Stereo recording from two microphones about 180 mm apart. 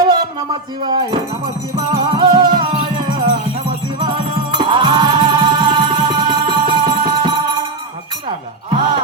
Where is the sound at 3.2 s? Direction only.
40° right (ahead or behind).